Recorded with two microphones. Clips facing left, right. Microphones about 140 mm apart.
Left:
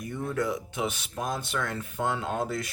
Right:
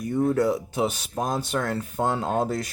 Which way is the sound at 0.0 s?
35° right (ahead or behind).